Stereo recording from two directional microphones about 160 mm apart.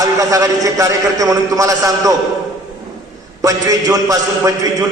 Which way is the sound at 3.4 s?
20° right (ahead or behind).